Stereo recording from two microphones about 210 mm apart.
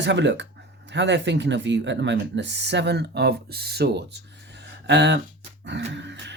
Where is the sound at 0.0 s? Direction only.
55° right (ahead or behind).